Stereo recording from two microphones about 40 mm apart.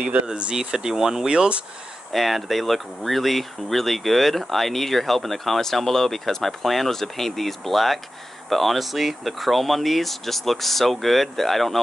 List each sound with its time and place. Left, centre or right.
0.3 s speech: right
2.1 s speech: centre